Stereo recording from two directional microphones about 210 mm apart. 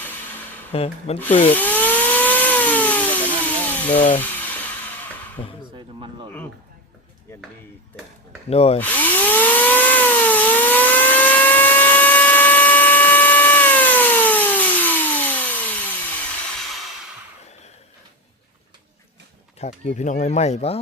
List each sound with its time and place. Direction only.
0.7 s speech: 30° left (ahead or behind)
1.5 s a sound: 10° left (ahead or behind)
5.4 s speech: 25° left (ahead or behind)
8.4 s speech: 30° left (ahead or behind)
8.8 s tools: 10° left (ahead or behind)
19.5 s speech: 30° left (ahead or behind)